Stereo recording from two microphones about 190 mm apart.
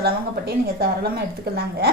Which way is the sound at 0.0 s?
55° right (ahead or behind).